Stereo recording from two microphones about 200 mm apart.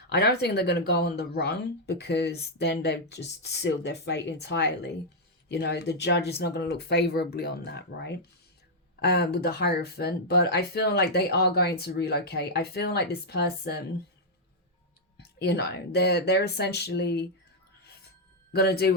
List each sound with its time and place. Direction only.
0.1 s speech: 55° left (ahead or behind)
15.2 s speech: 55° left (ahead or behind)
18.5 s speech: 50° left (ahead or behind)